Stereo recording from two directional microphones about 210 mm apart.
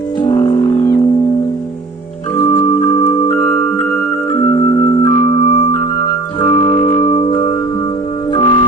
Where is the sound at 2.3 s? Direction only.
15° left (ahead or behind).